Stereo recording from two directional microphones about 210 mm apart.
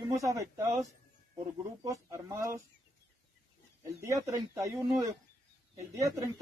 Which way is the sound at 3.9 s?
15° right (ahead or behind).